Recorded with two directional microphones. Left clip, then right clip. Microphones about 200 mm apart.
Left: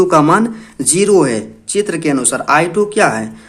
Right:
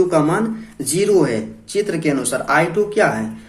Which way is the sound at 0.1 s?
45° left (ahead or behind).